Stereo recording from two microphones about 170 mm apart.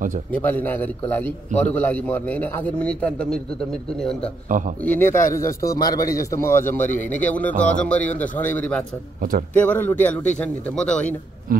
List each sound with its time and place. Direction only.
0.3 s a man's voice: 10° left (ahead or behind)
4.5 s a man's voice: 50° right (ahead or behind)
4.8 s a man's voice: 10° left (ahead or behind)